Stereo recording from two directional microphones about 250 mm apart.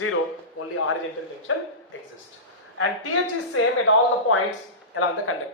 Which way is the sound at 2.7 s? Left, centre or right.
Left.